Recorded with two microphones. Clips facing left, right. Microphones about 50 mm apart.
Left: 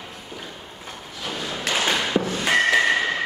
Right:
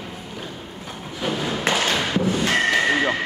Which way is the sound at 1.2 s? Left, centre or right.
Centre.